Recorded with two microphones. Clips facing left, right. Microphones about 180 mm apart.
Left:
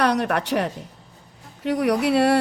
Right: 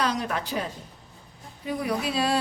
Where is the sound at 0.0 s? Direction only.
65° left (ahead or behind).